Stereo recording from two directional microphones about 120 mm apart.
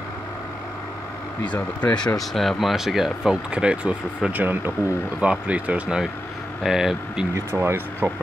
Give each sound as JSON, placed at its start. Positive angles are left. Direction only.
{"t": 1.4, "sound": "speech", "side_deg": 10}
{"t": 2.1, "sound": "speech", "side_deg": 0}
{"t": 7.3, "sound": "speech", "side_deg": -20}